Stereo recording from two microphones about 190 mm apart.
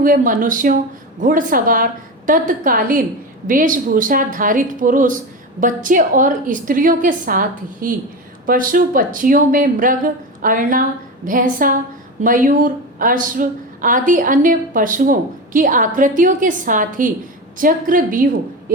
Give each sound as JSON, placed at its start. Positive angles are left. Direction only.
{"t": 0.0, "sound": "a woman's voice", "side_deg": -45}